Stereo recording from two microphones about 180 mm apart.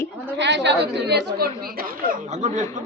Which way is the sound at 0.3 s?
75° right (ahead or behind).